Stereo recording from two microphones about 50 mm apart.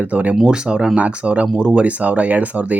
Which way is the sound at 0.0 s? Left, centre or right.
Right.